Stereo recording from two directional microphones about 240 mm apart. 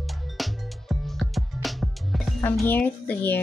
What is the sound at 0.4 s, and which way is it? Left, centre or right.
Music, centre.